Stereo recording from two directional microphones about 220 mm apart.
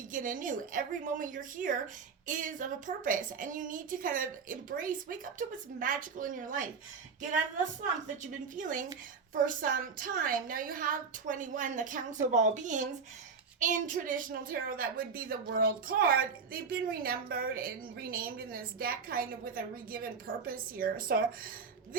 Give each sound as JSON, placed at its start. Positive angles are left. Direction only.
{"t": 0.1, "sound": "a woman's voice", "side_deg": -35}
{"t": 8.2, "sound": "a woman's voice", "side_deg": -35}